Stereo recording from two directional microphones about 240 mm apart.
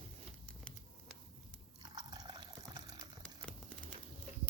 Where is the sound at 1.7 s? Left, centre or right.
Centre.